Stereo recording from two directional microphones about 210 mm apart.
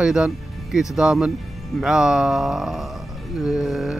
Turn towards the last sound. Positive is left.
turn(degrees=0)  # may be behind; listen again after turning